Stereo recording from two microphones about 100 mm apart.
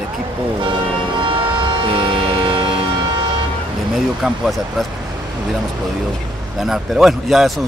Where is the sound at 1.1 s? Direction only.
55° right (ahead or behind).